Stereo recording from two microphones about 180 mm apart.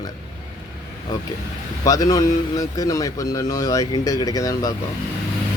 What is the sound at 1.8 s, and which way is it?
A man's voice, 20° left (ahead or behind).